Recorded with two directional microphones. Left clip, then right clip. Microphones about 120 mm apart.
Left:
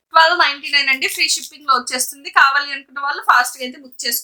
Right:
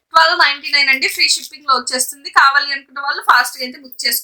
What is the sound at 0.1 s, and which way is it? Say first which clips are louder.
A woman's voice: right 1 dB; 15° left (ahead or behind).